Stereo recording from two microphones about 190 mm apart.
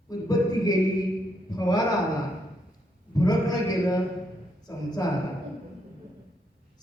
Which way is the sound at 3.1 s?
20° left (ahead or behind).